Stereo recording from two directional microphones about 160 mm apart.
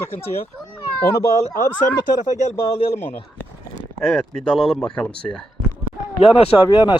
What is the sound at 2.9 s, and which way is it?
Speech, 10° left (ahead or behind).